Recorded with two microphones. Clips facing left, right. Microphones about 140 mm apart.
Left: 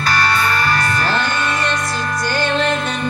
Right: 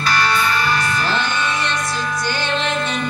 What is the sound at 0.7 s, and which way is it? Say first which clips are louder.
Music: left 2 dB; 50° left (ahead or behind).